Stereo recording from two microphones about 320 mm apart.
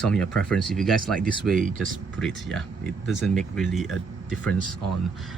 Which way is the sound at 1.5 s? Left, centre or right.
Right.